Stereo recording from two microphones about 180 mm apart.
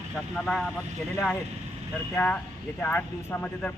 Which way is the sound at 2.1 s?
10° left (ahead or behind).